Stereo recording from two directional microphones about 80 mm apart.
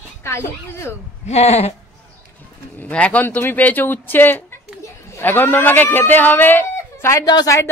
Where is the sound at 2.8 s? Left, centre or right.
Centre; by 7.7 s left.